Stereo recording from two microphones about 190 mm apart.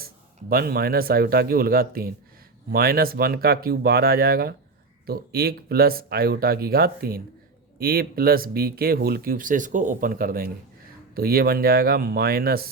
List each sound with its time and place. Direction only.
0.5 s speech: 50° right (ahead or behind)